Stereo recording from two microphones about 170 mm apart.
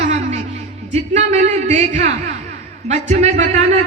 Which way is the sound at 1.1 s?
40° right (ahead or behind).